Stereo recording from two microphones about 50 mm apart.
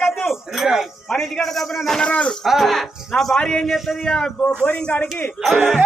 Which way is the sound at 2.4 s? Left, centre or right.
Centre.